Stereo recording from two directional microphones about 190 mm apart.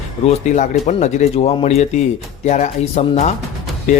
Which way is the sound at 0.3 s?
40° left (ahead or behind).